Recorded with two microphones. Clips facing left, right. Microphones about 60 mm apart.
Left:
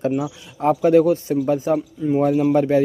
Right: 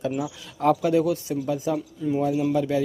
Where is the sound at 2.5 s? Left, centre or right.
Left.